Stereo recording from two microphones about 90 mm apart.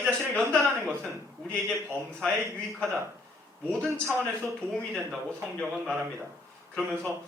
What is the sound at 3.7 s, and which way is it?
A man's voice, 10° left (ahead or behind).